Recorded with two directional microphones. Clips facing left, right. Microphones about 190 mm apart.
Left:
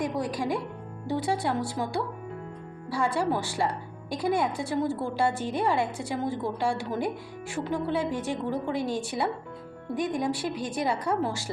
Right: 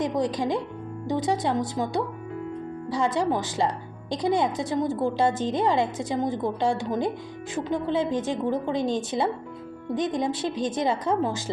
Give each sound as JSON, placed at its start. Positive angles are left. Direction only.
{"t": 0.0, "sound": "a woman's voice", "side_deg": -20}